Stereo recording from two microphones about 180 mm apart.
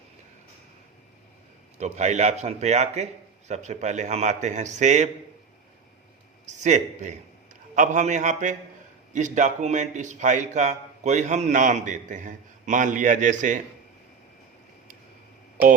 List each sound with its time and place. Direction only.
1.8 s a man's voice: 40° right (ahead or behind)
6.4 s a man's voice: 40° right (ahead or behind)